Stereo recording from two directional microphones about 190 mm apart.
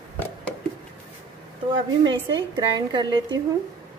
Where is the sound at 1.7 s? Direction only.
25° right (ahead or behind).